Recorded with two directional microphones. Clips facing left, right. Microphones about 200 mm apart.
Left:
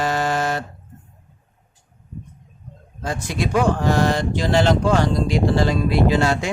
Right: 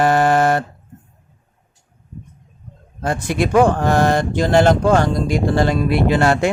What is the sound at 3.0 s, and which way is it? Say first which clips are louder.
Speech: right 5 dB; 55° right (ahead or behind).